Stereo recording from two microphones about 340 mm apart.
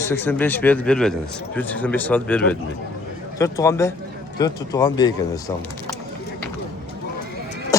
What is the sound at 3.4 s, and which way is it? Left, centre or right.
Speech, centre.